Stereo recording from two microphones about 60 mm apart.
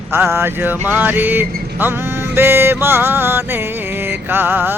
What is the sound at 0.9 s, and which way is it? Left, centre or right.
Music, right.